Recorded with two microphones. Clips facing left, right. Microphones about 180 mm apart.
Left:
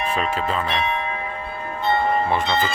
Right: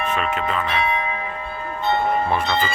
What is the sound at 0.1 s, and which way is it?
Speech, 30° left (ahead or behind).